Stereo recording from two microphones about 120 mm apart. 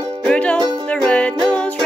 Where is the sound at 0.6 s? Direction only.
40° right (ahead or behind).